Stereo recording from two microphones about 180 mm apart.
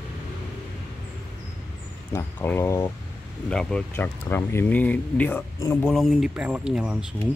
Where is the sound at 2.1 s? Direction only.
15° left (ahead or behind).